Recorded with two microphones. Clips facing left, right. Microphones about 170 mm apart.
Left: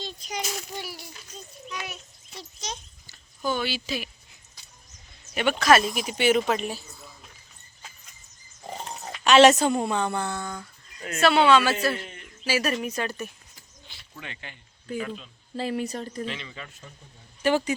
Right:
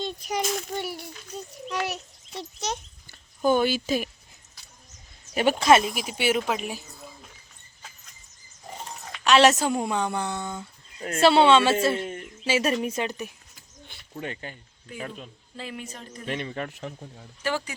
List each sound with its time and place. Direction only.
0.0 s a child's voice: 60° right (ahead or behind)
5.3 s speech: 35° right (ahead or behind)
5.8 s a woman's voice: 5° right (ahead or behind)
9.2 s a woman's voice: centre (ahead or behind); by 13.3 s 15° right (ahead or behind)
13.8 s a sound: 50° right (ahead or behind)
14.9 s speech: 45° right (ahead or behind)
15.5 s speech: 35° left (ahead or behind)
16.2 s speech: 50° right (ahead or behind); by 17.2 s 65° right (ahead or behind)
17.4 s speech: 20° left (ahead or behind)